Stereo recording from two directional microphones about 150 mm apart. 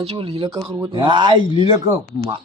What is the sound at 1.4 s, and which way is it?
Speech, 35° left (ahead or behind).